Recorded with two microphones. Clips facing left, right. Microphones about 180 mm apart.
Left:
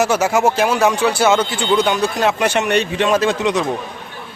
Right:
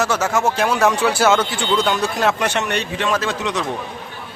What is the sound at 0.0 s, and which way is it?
Speech, 10° left (ahead or behind).